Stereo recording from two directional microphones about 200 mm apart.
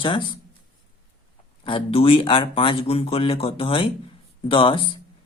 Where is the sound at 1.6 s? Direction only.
25° left (ahead or behind).